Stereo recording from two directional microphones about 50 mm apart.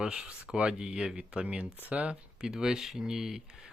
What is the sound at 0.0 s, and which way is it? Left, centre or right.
Speech, centre.